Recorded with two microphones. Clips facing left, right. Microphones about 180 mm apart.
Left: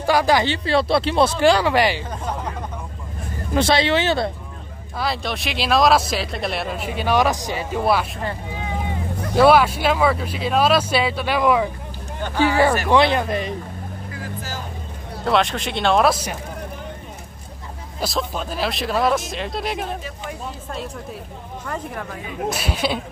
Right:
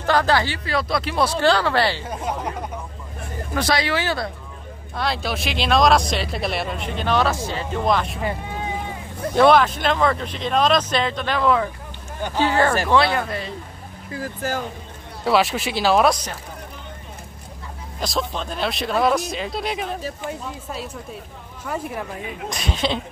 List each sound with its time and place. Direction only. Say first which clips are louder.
0.0 s speech: left 2 dB; 10° left (ahead or behind); by 1.3 s 25° left (ahead or behind)
1.4 s speech: left 1 dB; 15° left (ahead or behind)
2.0 s a sound: right 1 dB; 10° right (ahead or behind)
3.5 s speech: left 4 dB; 25° left (ahead or behind)
4.9 s speech: even; centre (ahead or behind)
9.3 s speech: left 1 dB; 5° left (ahead or behind)
15.2 s speech: right 1 dB; 5° right (ahead or behind)
18.0 s speech: left 1 dB; 5° left (ahead or behind)
22.5 s speech: even; 5° left (ahead or behind)